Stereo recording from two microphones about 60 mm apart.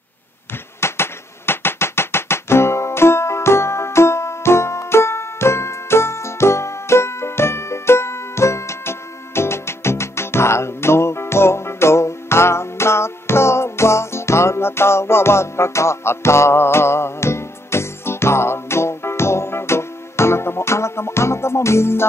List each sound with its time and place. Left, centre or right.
0.7 s music: left